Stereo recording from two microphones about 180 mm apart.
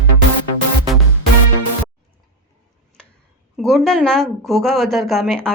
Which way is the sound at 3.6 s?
Centre (ahead or behind).